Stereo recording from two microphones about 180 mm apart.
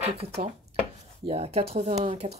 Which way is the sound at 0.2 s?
35° right (ahead or behind).